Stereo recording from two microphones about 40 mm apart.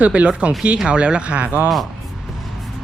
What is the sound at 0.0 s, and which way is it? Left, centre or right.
Speech, right.